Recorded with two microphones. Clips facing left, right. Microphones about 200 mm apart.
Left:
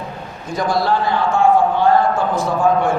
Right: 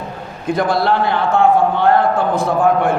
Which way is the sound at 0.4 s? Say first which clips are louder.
Right 3 dB; 60° right (ahead or behind).